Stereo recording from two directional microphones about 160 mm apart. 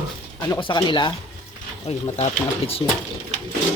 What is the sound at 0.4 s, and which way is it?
Speech, 25° left (ahead or behind).